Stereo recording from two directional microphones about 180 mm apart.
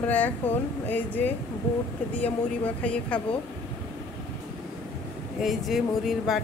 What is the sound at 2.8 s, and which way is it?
Speech, 5° left (ahead or behind).